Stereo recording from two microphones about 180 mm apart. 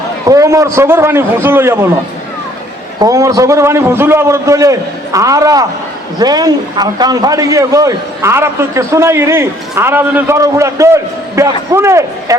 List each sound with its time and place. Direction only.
0.3 s a man's voice: 15° right (ahead or behind)
3.0 s a man's voice: 20° right (ahead or behind)